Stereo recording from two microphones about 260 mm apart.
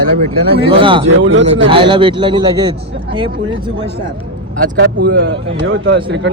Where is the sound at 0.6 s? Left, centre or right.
Centre.